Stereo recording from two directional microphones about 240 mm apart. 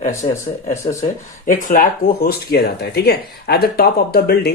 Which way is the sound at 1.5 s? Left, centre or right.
Left.